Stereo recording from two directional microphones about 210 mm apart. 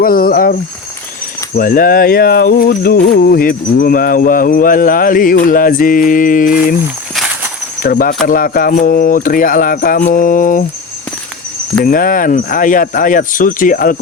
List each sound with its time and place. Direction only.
0.0 s a sound: 45° left (ahead or behind)
1.5 s a sound: 40° left (ahead or behind)
5.5 s music: 40° left (ahead or behind)
7.8 s speech: 45° left (ahead or behind)
8.3 s music: 40° left (ahead or behind)
11.8 s music: 40° left (ahead or behind)